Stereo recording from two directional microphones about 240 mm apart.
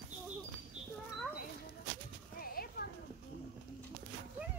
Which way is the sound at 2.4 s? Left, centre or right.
Left.